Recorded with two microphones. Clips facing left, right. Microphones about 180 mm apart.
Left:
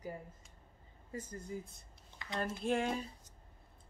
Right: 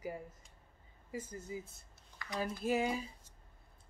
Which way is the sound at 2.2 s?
25° left (ahead or behind).